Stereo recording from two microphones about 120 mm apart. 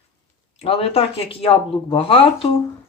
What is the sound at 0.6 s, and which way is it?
Speech, 55° left (ahead or behind).